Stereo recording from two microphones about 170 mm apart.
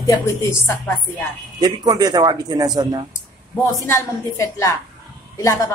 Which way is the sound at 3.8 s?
20° left (ahead or behind).